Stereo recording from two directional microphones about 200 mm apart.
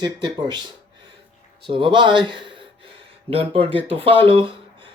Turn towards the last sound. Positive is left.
turn(degrees=-25)  # may be behind; listen again after turning